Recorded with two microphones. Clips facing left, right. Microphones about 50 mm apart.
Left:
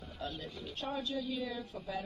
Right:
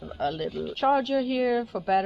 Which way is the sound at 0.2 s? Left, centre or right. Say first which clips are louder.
Right 14 dB; right.